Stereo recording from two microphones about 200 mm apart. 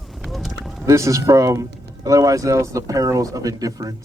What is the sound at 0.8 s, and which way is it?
Speech, 15° right (ahead or behind).